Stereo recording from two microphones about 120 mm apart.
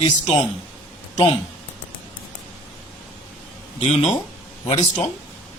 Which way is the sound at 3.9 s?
70° left (ahead or behind).